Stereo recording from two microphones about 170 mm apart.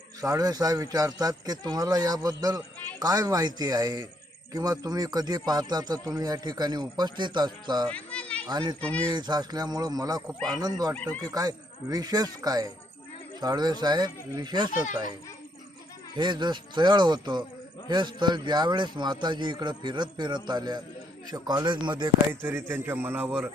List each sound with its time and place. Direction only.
0.2 s speech: 20° right (ahead or behind)
7.9 s a sound: 5° left (ahead or behind)
8.4 s speech: 25° right (ahead or behind)
16.1 s speech: 25° right (ahead or behind)
22.4 s a man's voice: 10° right (ahead or behind)